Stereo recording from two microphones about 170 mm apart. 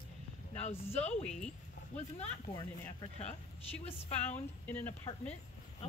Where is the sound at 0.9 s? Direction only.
40° left (ahead or behind).